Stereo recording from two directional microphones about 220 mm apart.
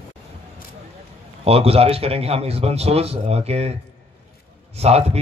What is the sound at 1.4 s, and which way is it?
A man's voice, 25° right (ahead or behind).